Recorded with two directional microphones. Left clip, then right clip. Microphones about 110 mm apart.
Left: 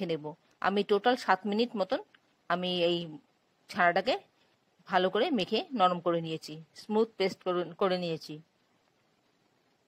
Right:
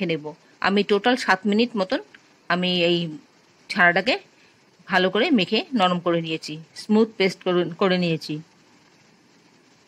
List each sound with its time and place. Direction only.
0.0 s speech: 40° left (ahead or behind)
5.7 s speech: 35° left (ahead or behind); by 6.9 s 50° left (ahead or behind)
6.9 s speech: 40° left (ahead or behind)